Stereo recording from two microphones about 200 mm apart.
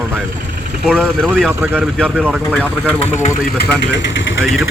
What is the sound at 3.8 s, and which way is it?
Speech, 65° left (ahead or behind).